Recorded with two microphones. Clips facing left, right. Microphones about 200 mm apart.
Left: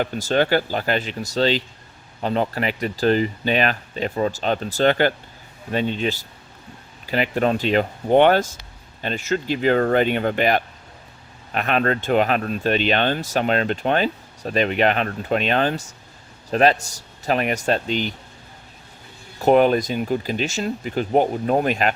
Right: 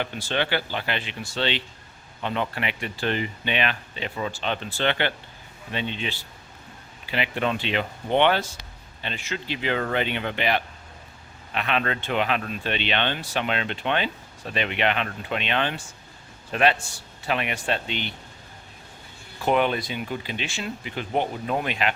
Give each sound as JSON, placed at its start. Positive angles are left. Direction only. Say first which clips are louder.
{"t": 0.0, "sound": "speech", "louder": "left 7 dB", "side_deg": 40}
{"t": 19.4, "sound": "speech", "louder": "left 7 dB", "side_deg": 40}